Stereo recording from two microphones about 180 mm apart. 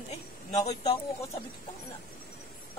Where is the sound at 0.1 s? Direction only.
40° left (ahead or behind).